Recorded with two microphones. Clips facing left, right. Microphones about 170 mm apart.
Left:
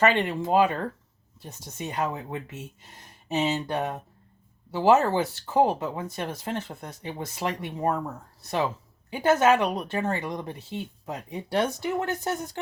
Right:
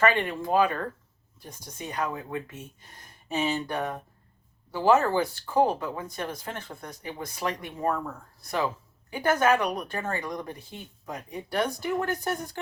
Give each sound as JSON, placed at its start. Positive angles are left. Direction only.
{"t": 0.0, "sound": "speech", "side_deg": 20}